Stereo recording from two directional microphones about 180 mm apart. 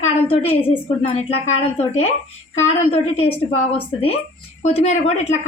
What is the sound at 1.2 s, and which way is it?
A woman's voice, 35° left (ahead or behind).